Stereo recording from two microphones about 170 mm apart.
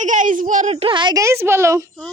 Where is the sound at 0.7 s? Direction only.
30° right (ahead or behind); by 1.8 s 15° right (ahead or behind).